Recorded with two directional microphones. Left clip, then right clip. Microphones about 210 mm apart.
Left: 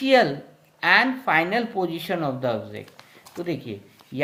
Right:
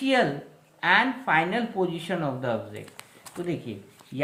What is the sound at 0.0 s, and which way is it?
Speech, 40° left (ahead or behind).